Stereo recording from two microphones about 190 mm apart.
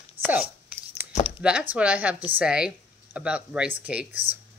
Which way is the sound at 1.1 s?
30° left (ahead or behind).